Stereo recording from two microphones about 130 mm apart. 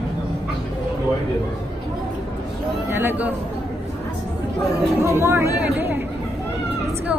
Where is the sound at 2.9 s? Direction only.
15° right (ahead or behind).